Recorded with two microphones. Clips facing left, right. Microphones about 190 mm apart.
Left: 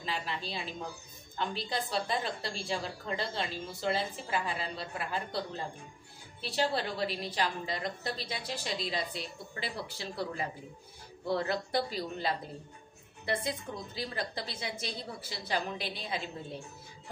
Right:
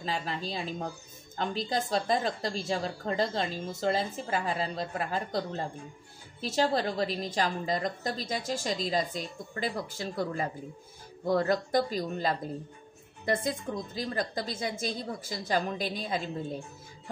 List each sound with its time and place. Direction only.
0.0 s a woman's voice: 40° right (ahead or behind)